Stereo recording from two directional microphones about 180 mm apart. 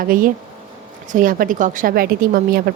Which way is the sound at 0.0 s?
50° right (ahead or behind).